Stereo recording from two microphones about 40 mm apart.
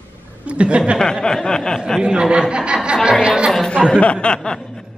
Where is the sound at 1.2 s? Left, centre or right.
Centre.